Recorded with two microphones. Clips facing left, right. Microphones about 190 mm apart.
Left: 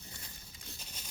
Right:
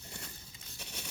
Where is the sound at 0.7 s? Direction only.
70° right (ahead or behind).